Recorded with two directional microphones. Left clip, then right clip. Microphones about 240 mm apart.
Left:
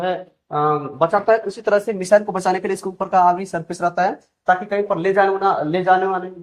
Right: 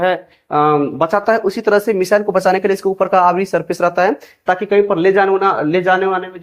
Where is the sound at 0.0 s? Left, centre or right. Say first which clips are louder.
Right 7 dB; right.